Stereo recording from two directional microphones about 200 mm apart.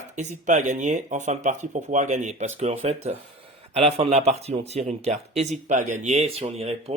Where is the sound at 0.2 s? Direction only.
35° right (ahead or behind).